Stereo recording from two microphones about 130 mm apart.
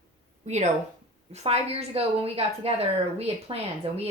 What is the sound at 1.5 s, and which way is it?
Speech, 50° right (ahead or behind).